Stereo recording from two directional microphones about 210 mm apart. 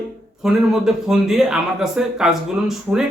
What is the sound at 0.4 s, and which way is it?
A man's voice, centre (ahead or behind).